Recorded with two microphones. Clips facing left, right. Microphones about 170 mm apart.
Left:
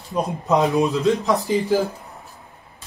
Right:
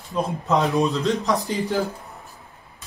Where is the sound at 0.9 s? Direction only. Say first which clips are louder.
Left 3 dB; centre (ahead or behind).